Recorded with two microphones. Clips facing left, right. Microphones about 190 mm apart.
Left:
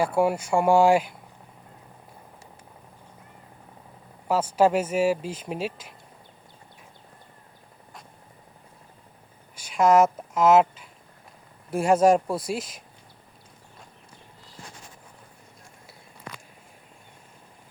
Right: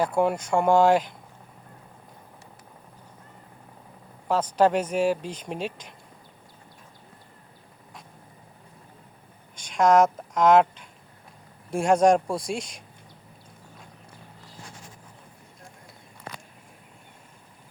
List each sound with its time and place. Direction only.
0.0 s speech: 5° left (ahead or behind)
4.3 s speech: 10° left (ahead or behind)
9.6 s speech: 5° left (ahead or behind)